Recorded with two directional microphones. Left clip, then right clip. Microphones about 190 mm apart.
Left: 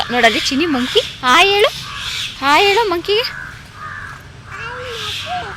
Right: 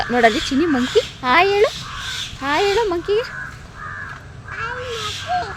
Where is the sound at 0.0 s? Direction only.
20° right (ahead or behind); by 3.3 s centre (ahead or behind).